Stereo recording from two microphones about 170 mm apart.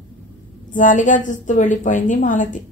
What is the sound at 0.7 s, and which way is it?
A woman's voice, 50° left (ahead or behind).